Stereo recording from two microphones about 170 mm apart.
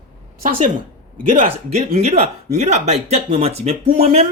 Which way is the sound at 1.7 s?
40° right (ahead or behind).